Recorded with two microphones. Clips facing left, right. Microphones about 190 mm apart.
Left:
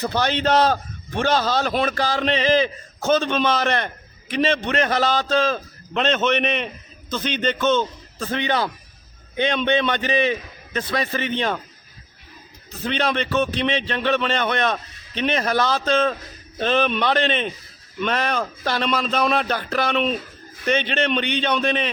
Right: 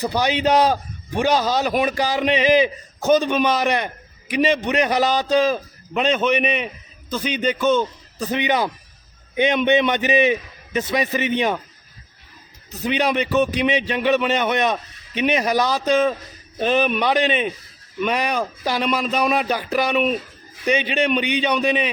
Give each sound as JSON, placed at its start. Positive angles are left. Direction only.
{"t": 0.0, "sound": "a man's voice", "side_deg": -15}
{"t": 12.8, "sound": "a man's voice", "side_deg": -15}